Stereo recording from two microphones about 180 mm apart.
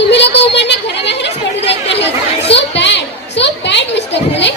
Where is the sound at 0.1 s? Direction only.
75° left (ahead or behind).